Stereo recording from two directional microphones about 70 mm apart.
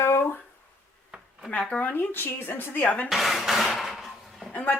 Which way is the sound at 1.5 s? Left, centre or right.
Centre.